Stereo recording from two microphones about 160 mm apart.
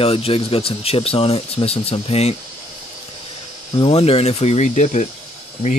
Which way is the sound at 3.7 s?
35° left (ahead or behind).